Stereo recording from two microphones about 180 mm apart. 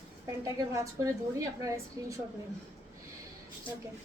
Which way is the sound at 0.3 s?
15° right (ahead or behind).